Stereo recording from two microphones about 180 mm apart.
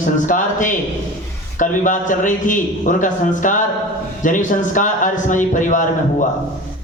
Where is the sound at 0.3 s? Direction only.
45° left (ahead or behind).